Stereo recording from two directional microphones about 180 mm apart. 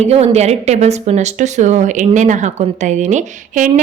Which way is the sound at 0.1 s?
35° right (ahead or behind).